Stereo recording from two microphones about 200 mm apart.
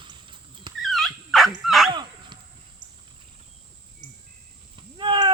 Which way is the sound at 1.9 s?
25° right (ahead or behind).